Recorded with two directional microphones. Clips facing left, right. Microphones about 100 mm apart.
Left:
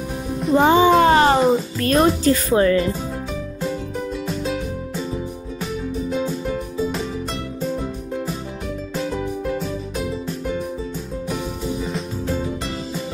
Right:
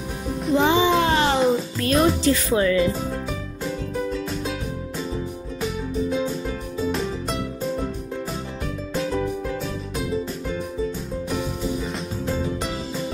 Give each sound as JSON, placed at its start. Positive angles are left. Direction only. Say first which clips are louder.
{"t": 0.6, "sound": "music", "louder": "left 5 dB", "side_deg": 45}
{"t": 1.9, "sound": "speech", "louder": "left 3 dB", "side_deg": 45}
{"t": 6.0, "sound": "music", "louder": "left 2 dB", "side_deg": 0}
{"t": 8.9, "sound": "music", "louder": "right 1 dB", "side_deg": 0}
{"t": 11.2, "sound": "music", "louder": "even", "side_deg": 0}